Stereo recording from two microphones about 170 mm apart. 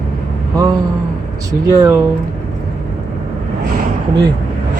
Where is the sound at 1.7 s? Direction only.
20° right (ahead or behind).